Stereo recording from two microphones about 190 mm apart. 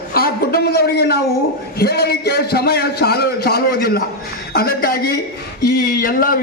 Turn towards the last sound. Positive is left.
turn(degrees=50)  # may be behind; listen again after turning